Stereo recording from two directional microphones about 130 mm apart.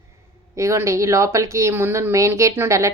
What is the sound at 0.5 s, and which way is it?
Speech, 20° right (ahead or behind).